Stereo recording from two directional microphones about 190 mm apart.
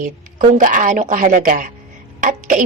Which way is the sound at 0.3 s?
45° right (ahead or behind).